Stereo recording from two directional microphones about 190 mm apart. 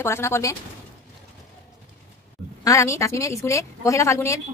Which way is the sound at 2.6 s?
15° left (ahead or behind).